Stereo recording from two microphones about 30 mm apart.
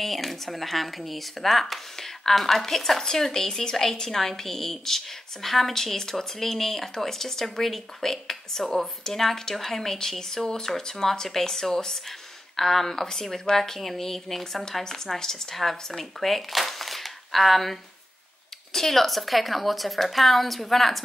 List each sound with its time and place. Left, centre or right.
0.0 s speech: centre